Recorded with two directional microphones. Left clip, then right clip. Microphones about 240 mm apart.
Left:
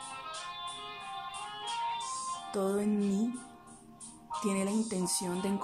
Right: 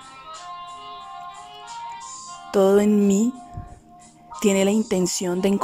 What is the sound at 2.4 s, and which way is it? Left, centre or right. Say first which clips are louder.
Music: right 17 dB; right.